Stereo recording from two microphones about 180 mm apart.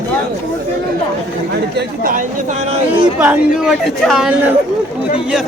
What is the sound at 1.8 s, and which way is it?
Speech, 50° right (ahead or behind).